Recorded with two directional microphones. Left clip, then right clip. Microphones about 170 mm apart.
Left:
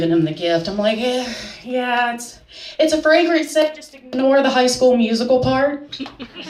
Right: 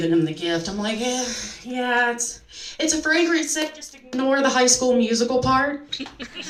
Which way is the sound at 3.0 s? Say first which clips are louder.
Left 4 dB; 30° left (ahead or behind).